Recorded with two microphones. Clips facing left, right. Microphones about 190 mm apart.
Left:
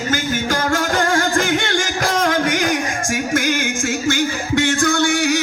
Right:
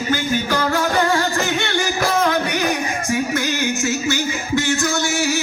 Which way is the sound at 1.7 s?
90° left.